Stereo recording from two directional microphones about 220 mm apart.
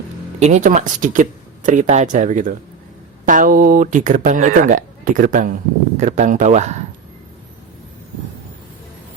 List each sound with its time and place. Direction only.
0.3 s speech: 30° right (ahead or behind)